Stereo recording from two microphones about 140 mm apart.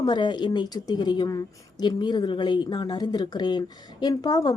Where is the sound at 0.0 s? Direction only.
30° left (ahead or behind).